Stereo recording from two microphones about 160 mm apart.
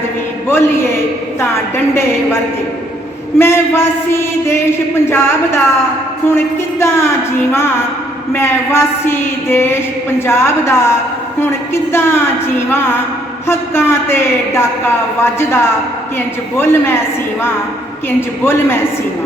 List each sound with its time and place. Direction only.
0.4 s a woman's voice: 15° left (ahead or behind)
18.4 s a woman's voice: 15° left (ahead or behind)